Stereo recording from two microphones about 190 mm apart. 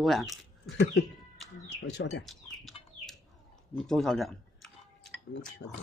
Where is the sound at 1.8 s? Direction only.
80° left.